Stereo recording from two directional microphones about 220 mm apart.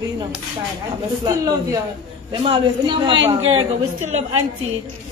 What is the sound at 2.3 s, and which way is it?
A woman's voice, 20° right (ahead or behind).